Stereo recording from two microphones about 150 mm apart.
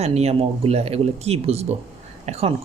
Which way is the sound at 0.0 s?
45° right (ahead or behind).